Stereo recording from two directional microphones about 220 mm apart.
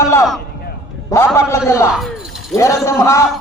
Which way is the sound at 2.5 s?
15° left (ahead or behind).